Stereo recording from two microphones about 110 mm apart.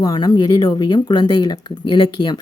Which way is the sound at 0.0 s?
40° left (ahead or behind).